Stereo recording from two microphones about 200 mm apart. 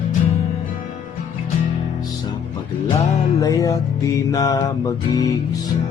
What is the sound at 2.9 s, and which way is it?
Music, 15° left (ahead or behind).